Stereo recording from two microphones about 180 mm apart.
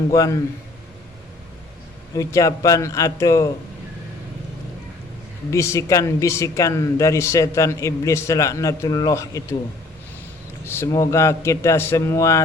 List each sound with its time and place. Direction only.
0.1 s a man's voice: 20° left (ahead or behind)
2.1 s speech: 20° left (ahead or behind)
5.5 s speech: 15° left (ahead or behind)
10.7 s speech: 15° left (ahead or behind)